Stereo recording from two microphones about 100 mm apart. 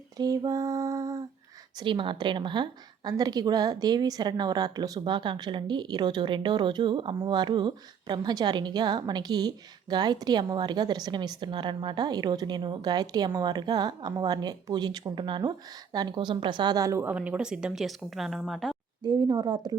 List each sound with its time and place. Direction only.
0.2 s lullaby: 35° right (ahead or behind)
1.8 s a woman's voice: 55° right (ahead or behind); by 17.1 s 30° right (ahead or behind)
17.1 s speech: 15° right (ahead or behind)
19.0 s a woman's voice: 45° right (ahead or behind)